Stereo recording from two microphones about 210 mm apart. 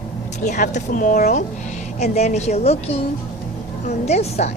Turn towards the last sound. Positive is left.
turn(degrees=30)  # may be behind; listen again after turning